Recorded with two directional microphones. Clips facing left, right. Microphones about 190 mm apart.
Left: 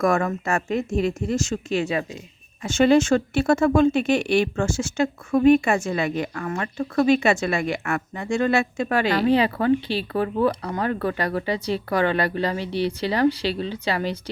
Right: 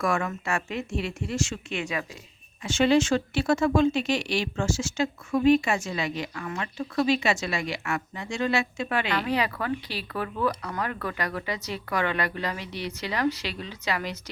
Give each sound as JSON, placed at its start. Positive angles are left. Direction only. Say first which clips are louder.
{"t": 0.0, "sound": "speech", "louder": "left 6 dB", "side_deg": 40}
{"t": 2.6, "sound": "speech", "louder": "left 5 dB", "side_deg": 45}